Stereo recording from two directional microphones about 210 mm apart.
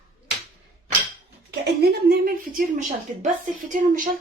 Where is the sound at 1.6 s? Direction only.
50° right (ahead or behind).